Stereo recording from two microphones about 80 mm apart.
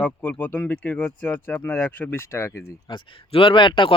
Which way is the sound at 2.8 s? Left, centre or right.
Left.